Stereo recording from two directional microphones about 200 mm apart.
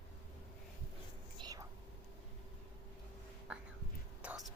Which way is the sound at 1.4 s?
25° right (ahead or behind).